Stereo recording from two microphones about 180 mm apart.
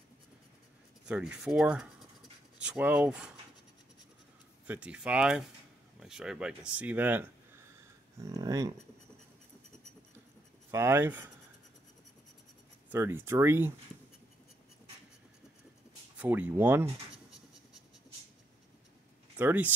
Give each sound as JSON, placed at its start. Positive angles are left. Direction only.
{"t": 1.0, "sound": "speech", "side_deg": -5}
{"t": 4.6, "sound": "speech", "side_deg": -5}
{"t": 10.7, "sound": "speech", "side_deg": -15}
{"t": 12.9, "sound": "speech", "side_deg": -10}
{"t": 16.2, "sound": "speech", "side_deg": -10}
{"t": 19.3, "sound": "speech", "side_deg": -10}